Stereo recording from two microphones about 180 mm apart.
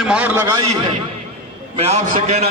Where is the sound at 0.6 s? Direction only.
30° right (ahead or behind).